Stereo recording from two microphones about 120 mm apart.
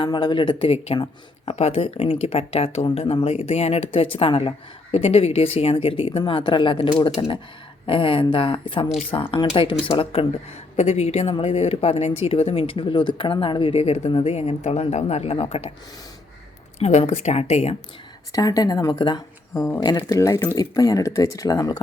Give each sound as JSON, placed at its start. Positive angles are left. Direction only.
{"t": 0.0, "sound": "speech", "side_deg": 40}
{"t": 4.9, "sound": "speech", "side_deg": 60}
{"t": 10.8, "sound": "speech", "side_deg": 65}
{"t": 13.7, "sound": "speech", "side_deg": 60}
{"t": 14.1, "sound": "speech", "side_deg": 45}
{"t": 14.3, "sound": "speech", "side_deg": 65}
{"t": 16.8, "sound": "speech", "side_deg": 60}
{"t": 18.3, "sound": "speech", "side_deg": 30}